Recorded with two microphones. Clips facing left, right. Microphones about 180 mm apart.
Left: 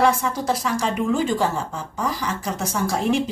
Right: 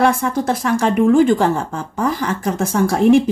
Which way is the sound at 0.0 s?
55° right (ahead or behind).